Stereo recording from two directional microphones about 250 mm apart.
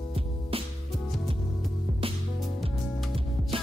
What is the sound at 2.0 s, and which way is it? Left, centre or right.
Music, right.